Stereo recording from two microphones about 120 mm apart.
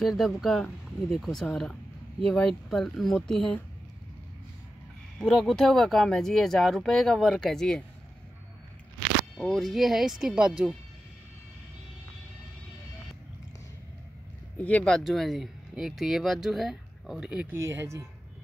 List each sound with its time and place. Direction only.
0.0 s speech: centre (ahead or behind)
5.2 s speech: 5° left (ahead or behind)
9.4 s speech: centre (ahead or behind)
14.6 s speech: 10° left (ahead or behind); by 17.5 s 5° right (ahead or behind)
17.5 s speech: 20° right (ahead or behind)